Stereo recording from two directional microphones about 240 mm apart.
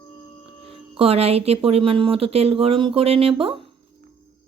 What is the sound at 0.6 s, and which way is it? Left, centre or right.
Speech, right.